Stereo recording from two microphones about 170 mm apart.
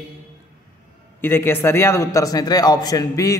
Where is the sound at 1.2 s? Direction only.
15° left (ahead or behind).